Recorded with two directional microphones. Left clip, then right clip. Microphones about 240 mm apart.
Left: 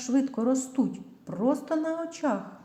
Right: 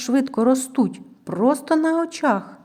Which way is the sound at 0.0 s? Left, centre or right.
Right.